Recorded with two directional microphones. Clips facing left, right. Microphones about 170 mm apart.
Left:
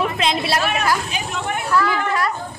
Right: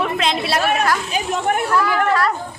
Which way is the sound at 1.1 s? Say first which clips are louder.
Right 5 dB; 40° right (ahead or behind).